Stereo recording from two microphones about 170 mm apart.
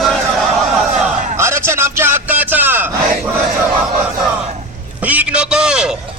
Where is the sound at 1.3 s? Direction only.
15° right (ahead or behind).